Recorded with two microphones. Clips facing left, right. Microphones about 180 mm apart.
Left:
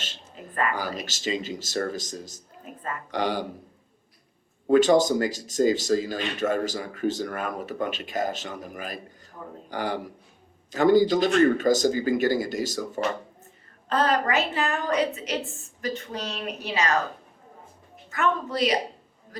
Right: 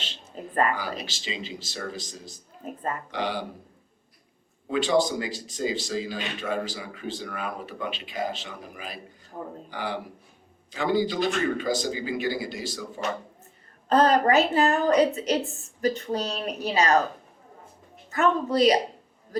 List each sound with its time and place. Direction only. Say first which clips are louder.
0.8 s speech: left 2 dB; 45° left (ahead or behind)
2.6 s a woman's voice: right 6 dB; 40° right (ahead or behind)
3.1 s speech: left 5 dB; 45° left (ahead or behind)
4.6 s speech: left 5 dB; 45° left (ahead or behind)
13.9 s a woman's voice: right 4 dB; 40° right (ahead or behind)
18.1 s a woman's voice: right 3 dB; 35° right (ahead or behind)